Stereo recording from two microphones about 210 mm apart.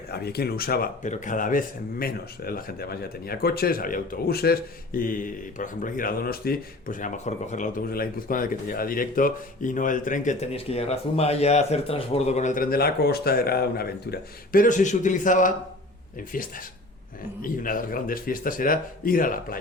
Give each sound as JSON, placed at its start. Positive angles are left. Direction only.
{"t": 0.1, "sound": "speech", "side_deg": 50}